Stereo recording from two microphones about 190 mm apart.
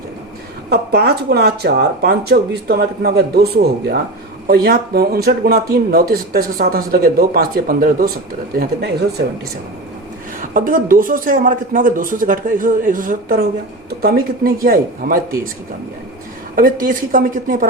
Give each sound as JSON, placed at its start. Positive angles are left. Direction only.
{"t": 0.7, "sound": "speech", "side_deg": -60}
{"t": 10.4, "sound": "speech", "side_deg": -45}
{"t": 16.6, "sound": "speech", "side_deg": -45}